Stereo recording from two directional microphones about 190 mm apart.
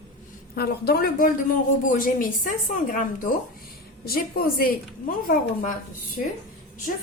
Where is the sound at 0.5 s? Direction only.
55° left (ahead or behind).